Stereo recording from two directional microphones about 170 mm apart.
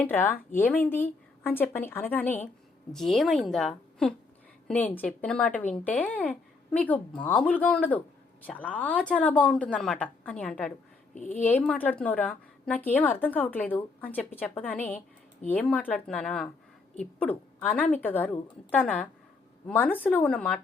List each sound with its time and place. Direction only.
0.0 s a woman's voice: 10° left (ahead or behind)
11.1 s speech: 45° left (ahead or behind)
11.4 s a woman's voice: 5° left (ahead or behind)